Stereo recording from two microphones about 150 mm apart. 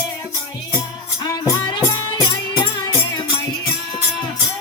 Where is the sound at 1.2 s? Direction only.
20° left (ahead or behind).